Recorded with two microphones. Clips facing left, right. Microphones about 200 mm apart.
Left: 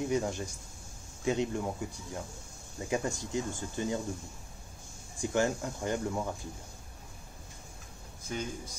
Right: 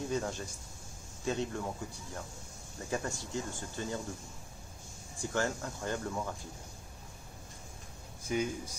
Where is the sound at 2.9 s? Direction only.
15° left (ahead or behind).